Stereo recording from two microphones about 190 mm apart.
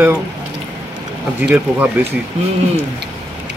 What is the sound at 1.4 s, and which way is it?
Speech, 10° right (ahead or behind).